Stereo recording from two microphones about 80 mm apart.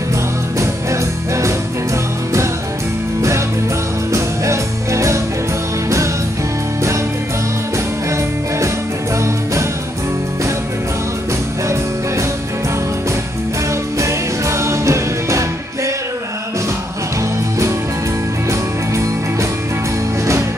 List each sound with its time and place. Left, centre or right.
3.2 s music: right
9.2 s music: right
13.9 s music: right